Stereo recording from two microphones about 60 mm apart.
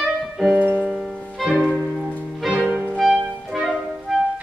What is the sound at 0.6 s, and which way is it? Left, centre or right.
Music, right.